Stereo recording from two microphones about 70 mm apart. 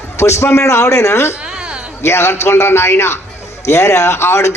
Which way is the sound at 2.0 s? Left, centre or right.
Left.